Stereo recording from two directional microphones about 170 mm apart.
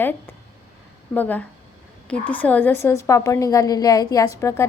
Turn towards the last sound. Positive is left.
turn(degrees=15)  # may be behind; listen again after turning